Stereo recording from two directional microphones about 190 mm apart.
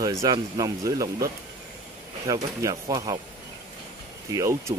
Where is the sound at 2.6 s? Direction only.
15° right (ahead or behind).